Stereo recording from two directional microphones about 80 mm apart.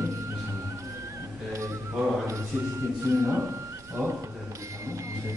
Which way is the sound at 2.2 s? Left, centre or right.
Right.